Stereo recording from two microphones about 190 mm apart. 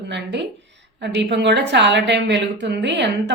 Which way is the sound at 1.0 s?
65° right (ahead or behind).